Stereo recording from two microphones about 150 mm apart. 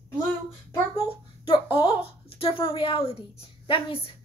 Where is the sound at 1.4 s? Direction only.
35° left (ahead or behind).